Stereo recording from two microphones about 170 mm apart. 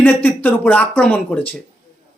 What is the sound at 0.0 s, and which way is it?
Speech, 10° left (ahead or behind).